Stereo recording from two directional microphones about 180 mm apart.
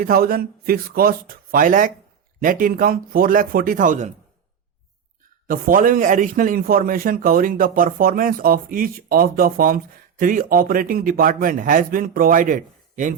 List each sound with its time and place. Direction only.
0.0 s a man's voice: 55° right (ahead or behind)
5.5 s a man's voice: 50° right (ahead or behind)